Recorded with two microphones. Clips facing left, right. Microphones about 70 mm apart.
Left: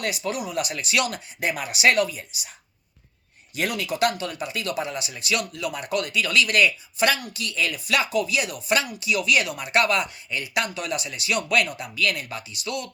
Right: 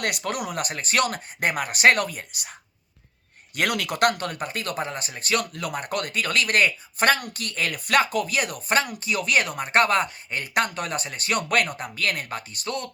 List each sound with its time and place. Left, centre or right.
0.0 s speech: right
3.5 s speech: right